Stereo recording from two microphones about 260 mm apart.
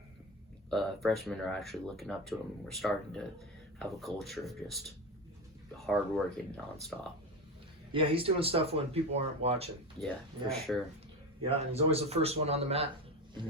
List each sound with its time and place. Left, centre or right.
0.7 s speech: centre
7.9 s speech: right
10.5 s speech: centre
11.4 s speech: right